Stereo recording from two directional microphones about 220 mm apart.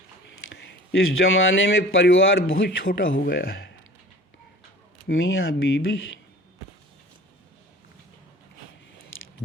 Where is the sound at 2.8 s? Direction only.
45° left (ahead or behind).